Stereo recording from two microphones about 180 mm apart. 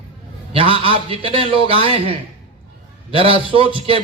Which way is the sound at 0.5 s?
30° right (ahead or behind).